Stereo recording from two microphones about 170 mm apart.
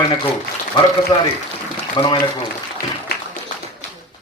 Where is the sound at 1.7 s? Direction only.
25° left (ahead or behind).